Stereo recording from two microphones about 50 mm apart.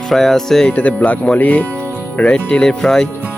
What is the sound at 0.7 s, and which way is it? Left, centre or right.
Speech, left.